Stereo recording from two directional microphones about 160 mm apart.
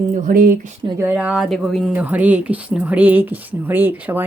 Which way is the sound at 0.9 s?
10° right (ahead or behind).